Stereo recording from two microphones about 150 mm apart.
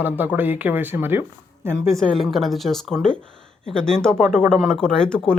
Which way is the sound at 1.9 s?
Centre (ahead or behind).